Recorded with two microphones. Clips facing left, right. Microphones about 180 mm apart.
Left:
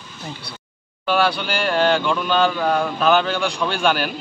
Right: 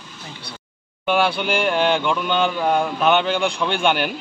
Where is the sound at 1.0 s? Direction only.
25° right (ahead or behind).